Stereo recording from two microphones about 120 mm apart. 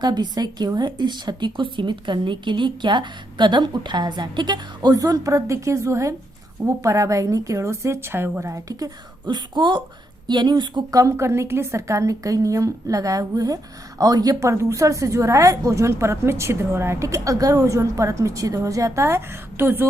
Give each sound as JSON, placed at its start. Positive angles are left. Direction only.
{"t": 0.0, "sound": "a woman's voice", "side_deg": -35}
{"t": 11.0, "sound": "a woman's voice", "side_deg": -25}